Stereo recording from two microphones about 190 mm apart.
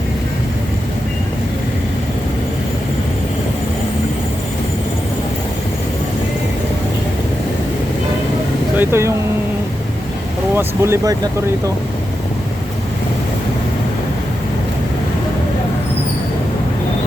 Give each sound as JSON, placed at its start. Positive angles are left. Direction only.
{"t": 8.7, "sound": "speech", "side_deg": -10}
{"t": 10.5, "sound": "speech", "side_deg": -10}